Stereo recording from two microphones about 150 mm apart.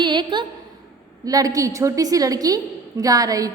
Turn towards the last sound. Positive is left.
turn(degrees=-25)  # may be behind; listen again after turning